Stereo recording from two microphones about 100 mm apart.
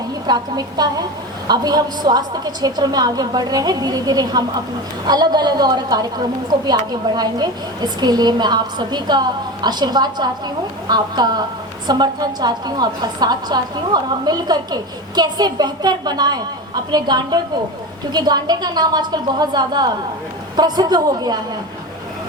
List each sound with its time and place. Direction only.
0.3 s a woman's voice: 45° right (ahead or behind)